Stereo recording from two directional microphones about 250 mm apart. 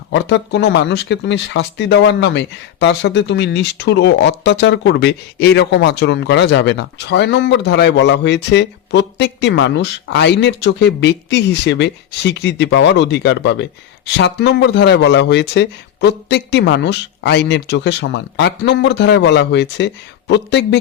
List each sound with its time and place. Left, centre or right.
0.1 s speech: left